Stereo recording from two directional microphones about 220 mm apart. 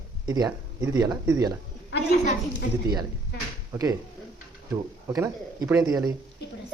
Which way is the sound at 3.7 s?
15° right (ahead or behind).